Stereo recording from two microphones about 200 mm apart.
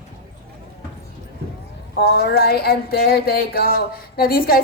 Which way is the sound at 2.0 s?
50° left (ahead or behind).